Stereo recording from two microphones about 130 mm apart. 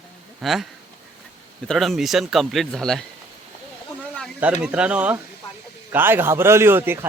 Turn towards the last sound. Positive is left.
turn(degrees=-20)  # may be behind; listen again after turning